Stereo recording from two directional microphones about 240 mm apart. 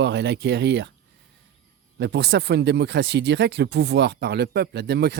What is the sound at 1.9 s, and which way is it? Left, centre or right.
Speech, right.